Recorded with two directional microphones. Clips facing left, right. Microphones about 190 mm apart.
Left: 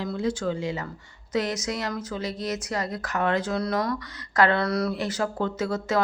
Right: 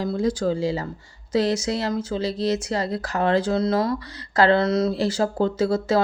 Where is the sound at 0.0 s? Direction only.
40° right (ahead or behind).